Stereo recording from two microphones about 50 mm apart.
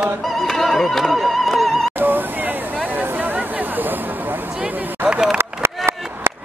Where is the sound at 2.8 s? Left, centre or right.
Right.